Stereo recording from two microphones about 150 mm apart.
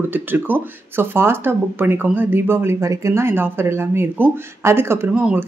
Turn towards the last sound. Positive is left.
turn(degrees=-10)  # may be behind; listen again after turning